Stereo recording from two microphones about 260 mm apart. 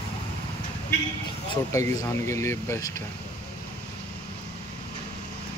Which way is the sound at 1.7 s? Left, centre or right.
Centre.